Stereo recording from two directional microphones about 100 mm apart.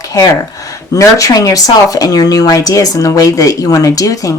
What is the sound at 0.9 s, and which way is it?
Speech, 35° left (ahead or behind).